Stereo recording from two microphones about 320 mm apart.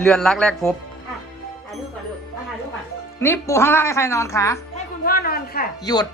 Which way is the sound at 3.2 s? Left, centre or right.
Centre.